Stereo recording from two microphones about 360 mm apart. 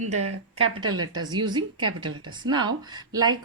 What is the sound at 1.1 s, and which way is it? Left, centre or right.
Speech, centre.